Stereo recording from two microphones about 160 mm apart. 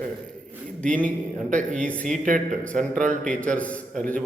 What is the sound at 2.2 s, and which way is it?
Speech, 55° right (ahead or behind).